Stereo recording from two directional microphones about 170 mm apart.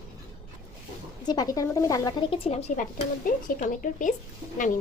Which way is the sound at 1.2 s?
25° left (ahead or behind).